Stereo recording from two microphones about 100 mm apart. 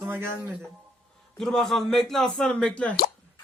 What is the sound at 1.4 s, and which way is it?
Speech, 5° left (ahead or behind).